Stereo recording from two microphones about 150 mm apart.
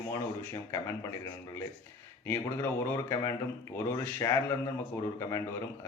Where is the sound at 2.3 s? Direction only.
15° left (ahead or behind).